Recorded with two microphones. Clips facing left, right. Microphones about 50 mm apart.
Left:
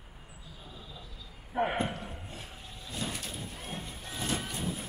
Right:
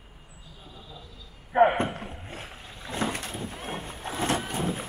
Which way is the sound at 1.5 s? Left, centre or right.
Right.